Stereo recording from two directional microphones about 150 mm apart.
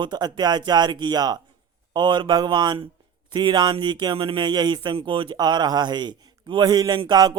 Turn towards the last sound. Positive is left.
turn(degrees=-25)  # may be behind; listen again after turning